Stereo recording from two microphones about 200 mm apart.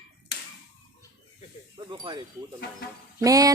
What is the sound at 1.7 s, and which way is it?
Speech, 25° right (ahead or behind).